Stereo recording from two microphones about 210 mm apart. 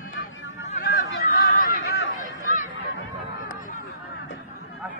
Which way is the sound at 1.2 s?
40° left (ahead or behind).